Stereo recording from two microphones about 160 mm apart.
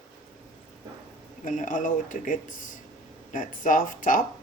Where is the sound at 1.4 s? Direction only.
55° left (ahead or behind).